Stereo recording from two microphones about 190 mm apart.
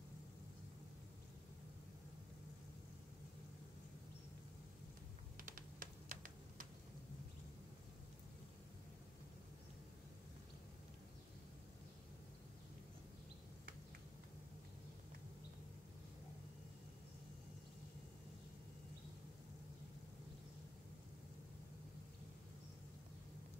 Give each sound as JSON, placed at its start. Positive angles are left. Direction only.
{"t": 5.4, "sound": "typing", "side_deg": -45}